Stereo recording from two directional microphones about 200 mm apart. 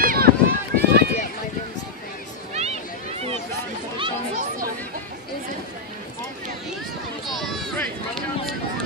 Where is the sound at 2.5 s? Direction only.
30° right (ahead or behind).